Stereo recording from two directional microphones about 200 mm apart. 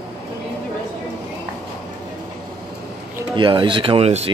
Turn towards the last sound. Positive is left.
turn(degrees=-30)  # may be behind; listen again after turning